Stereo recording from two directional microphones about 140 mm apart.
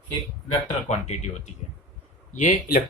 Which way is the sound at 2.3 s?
75° left (ahead or behind).